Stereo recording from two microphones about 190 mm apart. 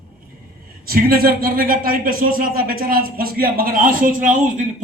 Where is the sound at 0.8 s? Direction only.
50° right (ahead or behind).